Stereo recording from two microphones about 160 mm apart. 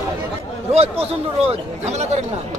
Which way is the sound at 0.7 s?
40° right (ahead or behind).